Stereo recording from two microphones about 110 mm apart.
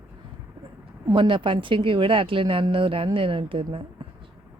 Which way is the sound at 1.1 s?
50° right (ahead or behind).